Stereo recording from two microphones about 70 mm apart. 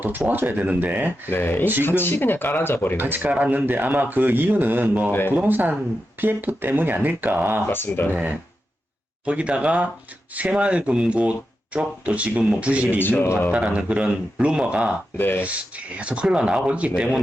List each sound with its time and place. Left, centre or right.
0.3 s speech: right
1.3 s speech: left
3.0 s speech: right
7.7 s speech: left
8.1 s speech: right
13.0 s speech: left
13.5 s speech: centre
15.2 s speech: left
15.4 s speech: centre